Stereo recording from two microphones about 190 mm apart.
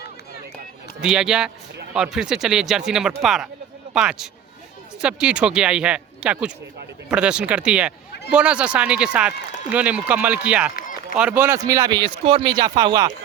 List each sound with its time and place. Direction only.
1.0 s speech: 5° right (ahead or behind); by 13.1 s 20° right (ahead or behind)